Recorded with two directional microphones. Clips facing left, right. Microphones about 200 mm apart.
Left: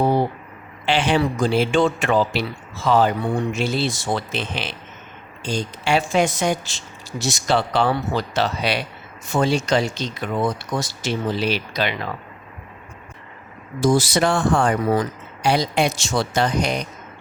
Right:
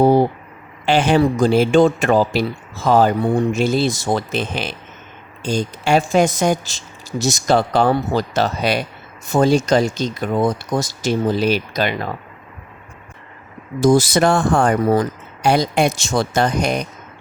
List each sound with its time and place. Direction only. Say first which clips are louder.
0.0 s a sound: right 6 dB; 40° right (ahead or behind)
0.9 s speech: right 5 dB; 45° right (ahead or behind)
13.8 s speech: right 4 dB; 45° right (ahead or behind)